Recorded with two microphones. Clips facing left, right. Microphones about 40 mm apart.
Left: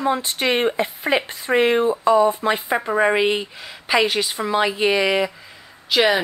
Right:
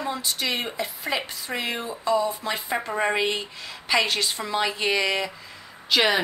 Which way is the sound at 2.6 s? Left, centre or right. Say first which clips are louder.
Left 5 dB; centre.